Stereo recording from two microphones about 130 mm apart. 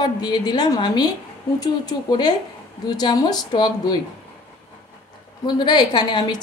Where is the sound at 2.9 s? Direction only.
30° left (ahead or behind).